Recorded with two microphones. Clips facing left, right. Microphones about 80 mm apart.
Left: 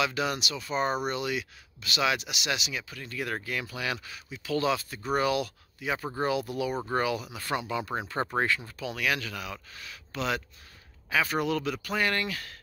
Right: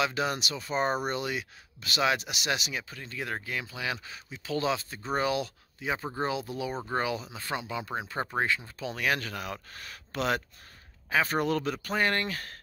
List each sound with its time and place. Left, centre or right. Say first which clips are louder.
0.0 s speech: even; right